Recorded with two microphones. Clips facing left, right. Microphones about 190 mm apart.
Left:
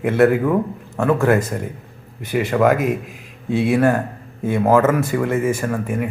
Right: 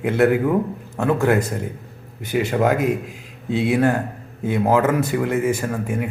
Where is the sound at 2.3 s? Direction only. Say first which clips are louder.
Left 2 dB; 25° right (ahead or behind).